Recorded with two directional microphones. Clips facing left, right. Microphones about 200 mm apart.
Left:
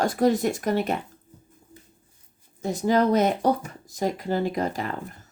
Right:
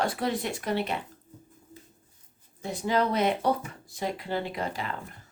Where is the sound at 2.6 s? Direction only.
45° left (ahead or behind).